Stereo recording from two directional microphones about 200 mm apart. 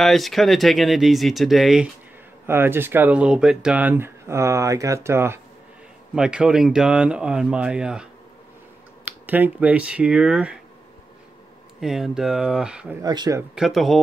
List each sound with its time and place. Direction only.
0.0 s speech: centre (ahead or behind)
11.8 s speech: centre (ahead or behind)
13.0 s a man's voice: 20° right (ahead or behind)
13.4 s speech: centre (ahead or behind)